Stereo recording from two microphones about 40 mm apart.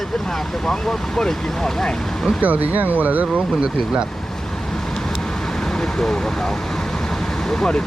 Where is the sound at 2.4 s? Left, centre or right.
Right.